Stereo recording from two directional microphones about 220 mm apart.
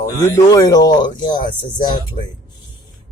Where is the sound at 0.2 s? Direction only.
15° left (ahead or behind).